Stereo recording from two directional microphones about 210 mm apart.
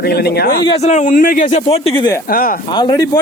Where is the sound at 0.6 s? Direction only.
30° left (ahead or behind).